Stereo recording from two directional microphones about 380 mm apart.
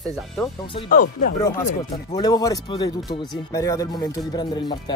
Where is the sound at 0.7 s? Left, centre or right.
Left.